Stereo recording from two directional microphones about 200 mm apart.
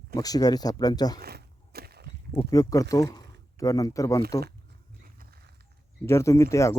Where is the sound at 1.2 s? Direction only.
50° right (ahead or behind).